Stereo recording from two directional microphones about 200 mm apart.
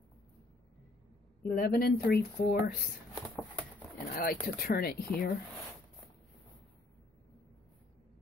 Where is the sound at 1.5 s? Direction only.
50° left (ahead or behind).